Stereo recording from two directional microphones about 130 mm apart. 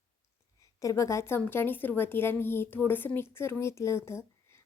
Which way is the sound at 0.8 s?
25° left (ahead or behind).